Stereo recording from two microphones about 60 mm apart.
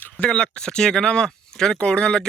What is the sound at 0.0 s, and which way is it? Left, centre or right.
Speech, centre.